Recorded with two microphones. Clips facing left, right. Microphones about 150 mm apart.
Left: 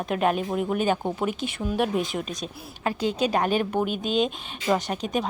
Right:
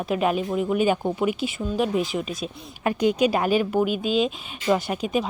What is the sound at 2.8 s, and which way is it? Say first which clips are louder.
A woman's voice: right 4 dB; 15° right (ahead or behind).